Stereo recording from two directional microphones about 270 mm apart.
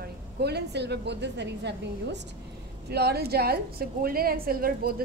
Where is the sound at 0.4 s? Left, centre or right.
Right.